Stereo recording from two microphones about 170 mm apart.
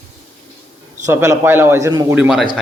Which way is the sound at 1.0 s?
15° right (ahead or behind).